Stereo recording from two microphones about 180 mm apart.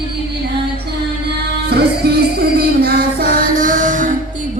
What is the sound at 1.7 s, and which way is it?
Music, 65° right (ahead or behind).